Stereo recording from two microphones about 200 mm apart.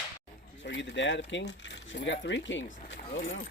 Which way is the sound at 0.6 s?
65° left (ahead or behind).